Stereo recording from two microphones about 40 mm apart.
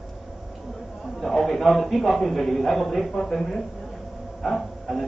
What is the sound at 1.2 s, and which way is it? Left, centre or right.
A man's voice, centre.